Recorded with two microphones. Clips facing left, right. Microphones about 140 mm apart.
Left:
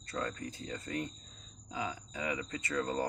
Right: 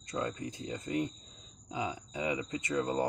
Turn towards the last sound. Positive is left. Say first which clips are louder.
# right 3 dB
turn(degrees=-20)  # may be behind; listen again after turning